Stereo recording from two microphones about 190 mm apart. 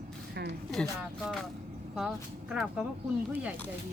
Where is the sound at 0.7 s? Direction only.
Centre (ahead or behind).